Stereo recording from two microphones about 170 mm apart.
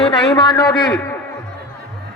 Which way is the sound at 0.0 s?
25° left (ahead or behind).